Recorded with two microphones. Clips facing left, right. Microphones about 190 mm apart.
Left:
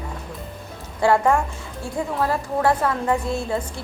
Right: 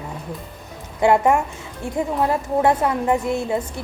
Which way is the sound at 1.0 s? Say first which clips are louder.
Right 2 dB; 20° right (ahead or behind).